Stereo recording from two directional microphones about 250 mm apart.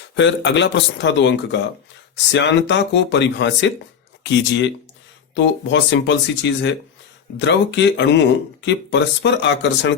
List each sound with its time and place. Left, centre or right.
0.2 s speech: left